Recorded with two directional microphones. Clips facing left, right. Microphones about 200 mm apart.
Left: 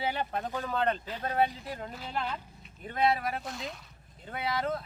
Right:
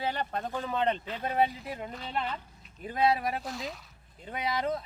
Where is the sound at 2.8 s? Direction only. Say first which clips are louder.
Right 1 dB; 20° right (ahead or behind).